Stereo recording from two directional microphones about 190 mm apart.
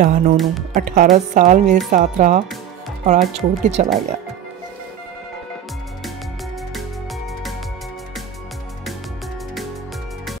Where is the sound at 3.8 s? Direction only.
40° right (ahead or behind).